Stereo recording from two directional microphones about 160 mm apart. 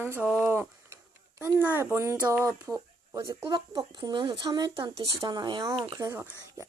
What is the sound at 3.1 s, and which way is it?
Speech, 20° right (ahead or behind).